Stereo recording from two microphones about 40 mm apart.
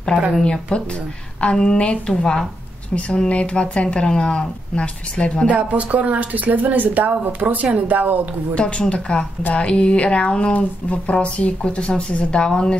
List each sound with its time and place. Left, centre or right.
0.4 s speech: left
5.5 s speech: right
8.5 s speech: left